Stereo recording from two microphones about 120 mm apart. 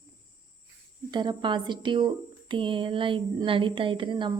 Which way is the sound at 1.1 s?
40° right (ahead or behind).